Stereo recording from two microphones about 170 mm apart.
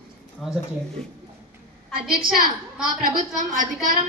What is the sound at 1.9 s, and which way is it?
A woman's voice, 60° right (ahead or behind).